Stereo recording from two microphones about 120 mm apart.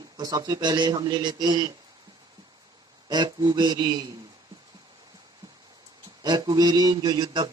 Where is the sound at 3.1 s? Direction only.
35° right (ahead or behind).